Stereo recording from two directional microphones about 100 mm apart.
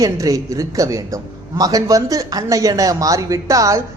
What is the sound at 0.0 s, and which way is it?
A man's voice, 35° right (ahead or behind).